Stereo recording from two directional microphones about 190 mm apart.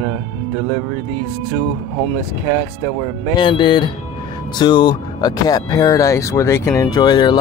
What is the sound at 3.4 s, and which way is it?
Speech, 25° left (ahead or behind).